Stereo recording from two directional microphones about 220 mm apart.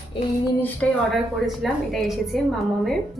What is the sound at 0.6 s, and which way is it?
A woman's voice, 5° left (ahead or behind).